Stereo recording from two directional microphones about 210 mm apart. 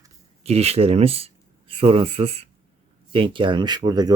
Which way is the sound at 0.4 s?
30° right (ahead or behind).